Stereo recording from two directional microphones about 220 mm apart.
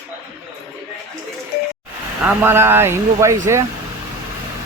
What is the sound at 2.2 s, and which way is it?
Speech, 10° right (ahead or behind).